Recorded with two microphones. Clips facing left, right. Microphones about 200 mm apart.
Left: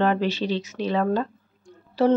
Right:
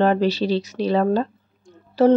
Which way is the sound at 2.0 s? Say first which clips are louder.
Right 4 dB; 45° right (ahead or behind).